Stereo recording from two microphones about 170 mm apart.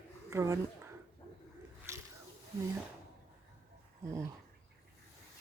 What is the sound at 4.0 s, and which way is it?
Dog, 15° right (ahead or behind).